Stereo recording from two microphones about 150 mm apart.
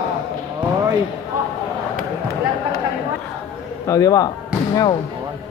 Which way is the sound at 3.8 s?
25° left (ahead or behind).